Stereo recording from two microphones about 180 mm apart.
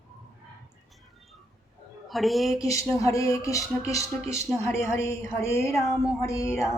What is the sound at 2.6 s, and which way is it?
A woman's voice, 15° left (ahead or behind).